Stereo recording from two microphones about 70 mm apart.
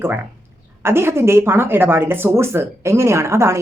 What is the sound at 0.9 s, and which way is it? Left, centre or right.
Speech, right.